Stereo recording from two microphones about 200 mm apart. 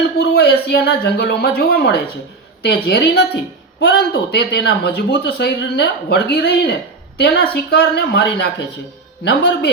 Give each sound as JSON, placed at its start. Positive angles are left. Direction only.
{"t": 0.2, "sound": "speech", "side_deg": 55}